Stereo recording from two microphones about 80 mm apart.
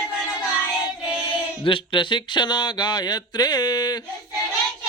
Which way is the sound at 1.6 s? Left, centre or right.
Left.